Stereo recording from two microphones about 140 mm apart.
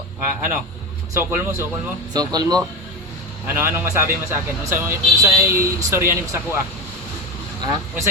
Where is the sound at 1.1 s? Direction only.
15° right (ahead or behind).